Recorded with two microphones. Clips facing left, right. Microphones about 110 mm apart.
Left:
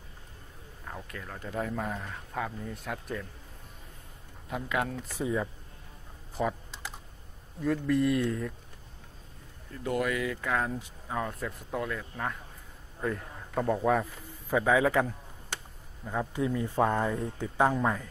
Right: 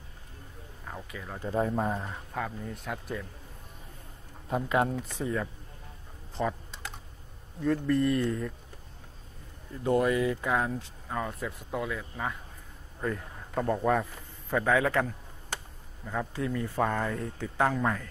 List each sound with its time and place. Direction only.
0.8 s speech: 5° right (ahead or behind)
1.4 s speech: 30° right (ahead or behind)
2.3 s speech: centre (ahead or behind)
4.5 s speech: 30° right (ahead or behind)
5.0 s speech: 5° left (ahead or behind)
6.3 s typing: 5° left (ahead or behind)
7.6 s speech: centre (ahead or behind)
9.7 s speech: 25° right (ahead or behind)
10.8 s speech: 5° left (ahead or behind)